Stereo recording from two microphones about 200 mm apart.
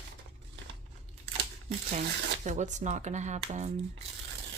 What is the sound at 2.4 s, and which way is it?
Speech, 35° right (ahead or behind).